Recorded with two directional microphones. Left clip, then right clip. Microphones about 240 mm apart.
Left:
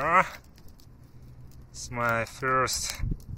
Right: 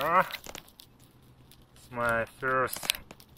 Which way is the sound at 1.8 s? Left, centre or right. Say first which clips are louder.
Left 1 dB; centre.